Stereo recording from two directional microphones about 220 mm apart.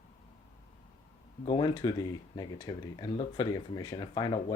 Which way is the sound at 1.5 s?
20° left (ahead or behind).